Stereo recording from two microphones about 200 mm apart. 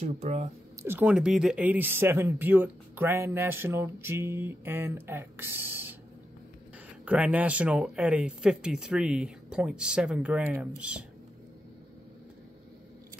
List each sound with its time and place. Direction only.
0.0 s speech: 35° right (ahead or behind)
0.8 s speech: 5° right (ahead or behind)
7.1 s speech: 5° right (ahead or behind)